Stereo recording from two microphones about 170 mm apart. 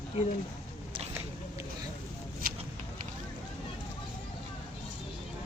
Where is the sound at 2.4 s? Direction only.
60° right (ahead or behind).